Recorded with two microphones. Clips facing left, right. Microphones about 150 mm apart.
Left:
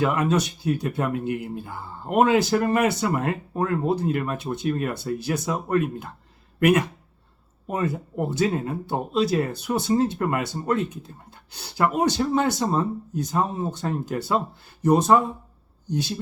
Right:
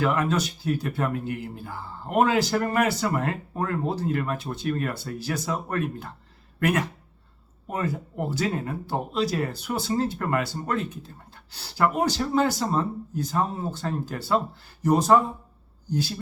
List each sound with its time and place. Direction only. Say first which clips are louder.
0.0 s speech: left 2 dB; 20° left (ahead or behind)